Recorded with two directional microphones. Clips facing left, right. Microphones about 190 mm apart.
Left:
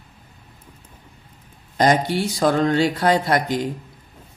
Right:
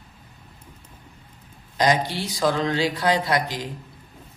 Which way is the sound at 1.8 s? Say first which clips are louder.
Left 4 dB; 50° left (ahead or behind).